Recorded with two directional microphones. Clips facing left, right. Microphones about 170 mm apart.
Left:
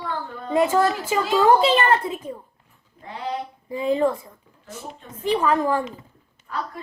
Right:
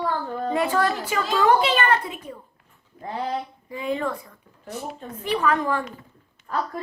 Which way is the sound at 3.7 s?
25° left (ahead or behind).